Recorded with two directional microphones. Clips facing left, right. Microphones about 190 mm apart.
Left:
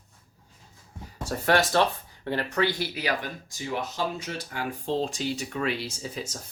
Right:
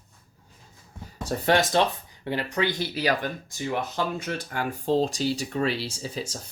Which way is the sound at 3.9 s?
55° right (ahead or behind).